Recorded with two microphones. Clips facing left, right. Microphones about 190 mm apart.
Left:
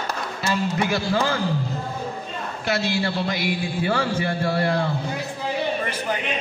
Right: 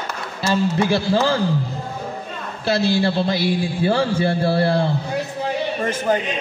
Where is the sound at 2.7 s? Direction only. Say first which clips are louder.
Right 6 dB; 30° right (ahead or behind).